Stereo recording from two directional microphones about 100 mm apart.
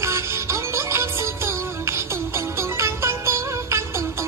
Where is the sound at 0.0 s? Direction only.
30° right (ahead or behind).